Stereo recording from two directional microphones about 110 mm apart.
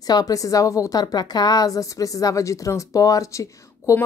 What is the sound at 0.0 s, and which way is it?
A woman's voice, 35° left (ahead or behind).